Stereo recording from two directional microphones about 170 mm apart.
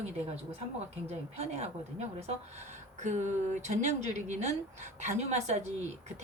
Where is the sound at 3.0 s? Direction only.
45° right (ahead or behind).